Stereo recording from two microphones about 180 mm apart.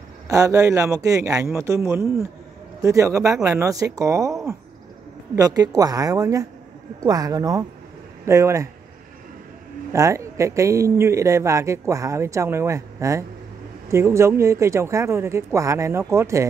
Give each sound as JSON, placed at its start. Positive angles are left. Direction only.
{"t": 0.3, "sound": "speech", "side_deg": -20}
{"t": 5.3, "sound": "speech", "side_deg": -20}
{"t": 9.9, "sound": "speech", "side_deg": -15}